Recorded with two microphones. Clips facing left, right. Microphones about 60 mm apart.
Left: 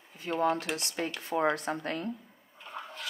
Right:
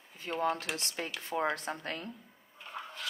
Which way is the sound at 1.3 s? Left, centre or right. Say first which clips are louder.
Left 3 dB; left.